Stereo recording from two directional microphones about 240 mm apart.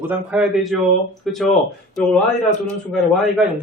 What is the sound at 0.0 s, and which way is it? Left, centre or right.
A man's voice, centre.